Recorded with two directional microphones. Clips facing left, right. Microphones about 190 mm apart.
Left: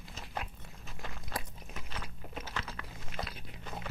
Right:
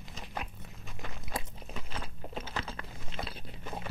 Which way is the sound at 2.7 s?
30° right (ahead or behind).